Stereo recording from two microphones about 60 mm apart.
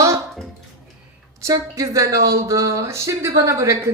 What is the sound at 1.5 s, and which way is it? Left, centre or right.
Speech, right.